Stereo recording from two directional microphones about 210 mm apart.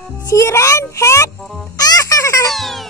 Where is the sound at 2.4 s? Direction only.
Centre (ahead or behind).